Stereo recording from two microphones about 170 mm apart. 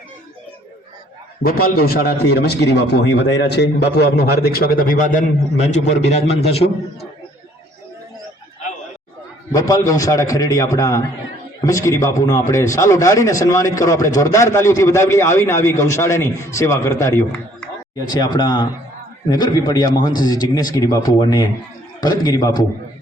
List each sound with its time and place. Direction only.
1.4 s a man's voice: 60° left (ahead or behind); by 6.7 s 40° left (ahead or behind)
9.5 s a man's voice: 20° left (ahead or behind)